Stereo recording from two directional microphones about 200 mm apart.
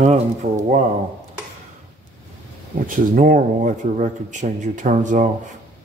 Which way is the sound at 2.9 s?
40° right (ahead or behind).